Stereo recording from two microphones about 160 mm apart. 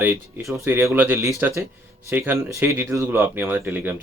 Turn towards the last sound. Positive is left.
turn(degrees=-10)  # may be behind; listen again after turning